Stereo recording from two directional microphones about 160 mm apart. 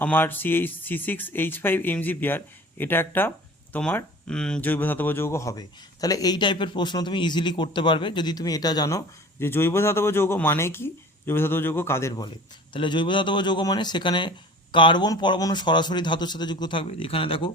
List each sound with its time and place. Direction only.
0.0 s speech: 10° left (ahead or behind); by 17.5 s 35° left (ahead or behind)